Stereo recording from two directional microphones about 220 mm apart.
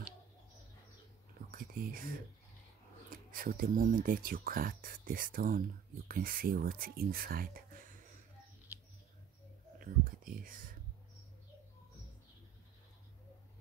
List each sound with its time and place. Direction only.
1.5 s speech: 40° right (ahead or behind)
3.3 s speech: 40° right (ahead or behind)
9.8 s whispering: 40° right (ahead or behind)